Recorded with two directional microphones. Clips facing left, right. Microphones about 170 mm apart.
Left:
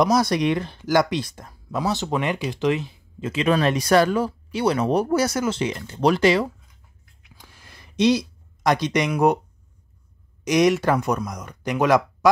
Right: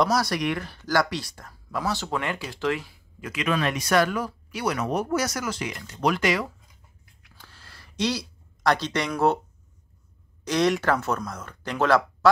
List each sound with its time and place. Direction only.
0.0 s speech: 20° left (ahead or behind)
7.2 s a sound: 15° left (ahead or behind)
10.4 s speech: 15° left (ahead or behind)